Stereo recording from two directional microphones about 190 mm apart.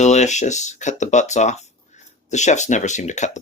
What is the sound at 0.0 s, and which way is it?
Speech, 40° left (ahead or behind).